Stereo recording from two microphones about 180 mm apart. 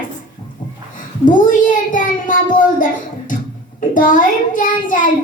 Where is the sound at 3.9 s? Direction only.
45° left (ahead or behind).